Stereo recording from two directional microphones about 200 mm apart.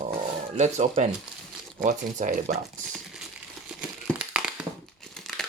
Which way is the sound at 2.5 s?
Centre (ahead or behind).